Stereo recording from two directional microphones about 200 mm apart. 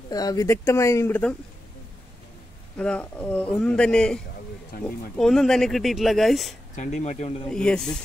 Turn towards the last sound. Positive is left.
turn(degrees=5)  # may be behind; listen again after turning